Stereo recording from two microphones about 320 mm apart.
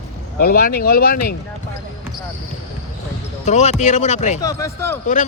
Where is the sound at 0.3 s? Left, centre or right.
Left.